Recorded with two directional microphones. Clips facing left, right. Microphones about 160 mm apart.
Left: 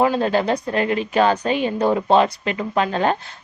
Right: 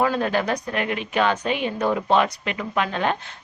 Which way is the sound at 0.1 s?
30° left (ahead or behind).